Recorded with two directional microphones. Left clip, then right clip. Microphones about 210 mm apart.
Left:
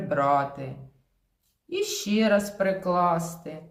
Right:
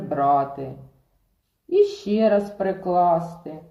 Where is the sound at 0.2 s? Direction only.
45° left (ahead or behind).